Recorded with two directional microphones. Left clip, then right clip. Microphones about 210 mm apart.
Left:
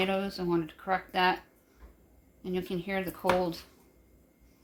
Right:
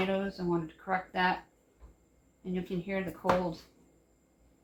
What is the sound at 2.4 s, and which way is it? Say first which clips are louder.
Speech: left 3 dB; 50° left (ahead or behind).